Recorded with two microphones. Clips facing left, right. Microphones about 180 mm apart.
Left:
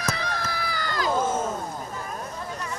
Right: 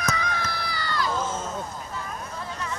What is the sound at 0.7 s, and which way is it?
Run, 45° left (ahead or behind).